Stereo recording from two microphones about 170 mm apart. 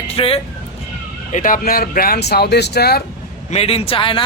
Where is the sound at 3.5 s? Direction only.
40° left (ahead or behind).